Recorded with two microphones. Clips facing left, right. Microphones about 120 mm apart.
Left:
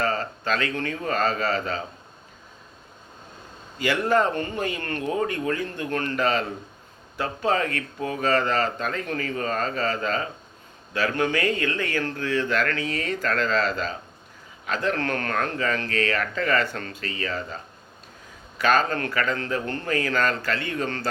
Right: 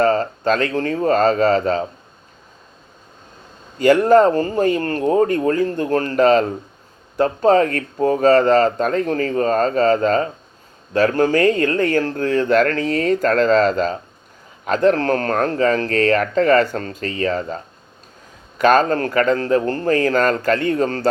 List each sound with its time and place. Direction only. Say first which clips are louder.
0.0 s speech: right 10 dB; 40° right (ahead or behind)
3.8 s speech: right 10 dB; 45° right (ahead or behind)